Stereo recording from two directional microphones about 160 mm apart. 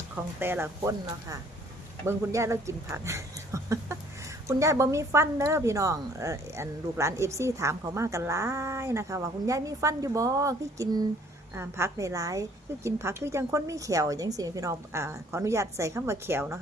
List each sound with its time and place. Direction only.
0.3 s speech: 15° right (ahead or behind)
0.8 s a woman's voice: 25° right (ahead or behind)
2.9 s a sound: 15° right (ahead or behind)
4.4 s a woman's voice: 20° right (ahead or behind)